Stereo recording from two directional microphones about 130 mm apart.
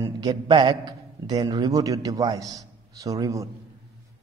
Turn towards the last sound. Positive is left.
turn(degrees=-25)  # may be behind; listen again after turning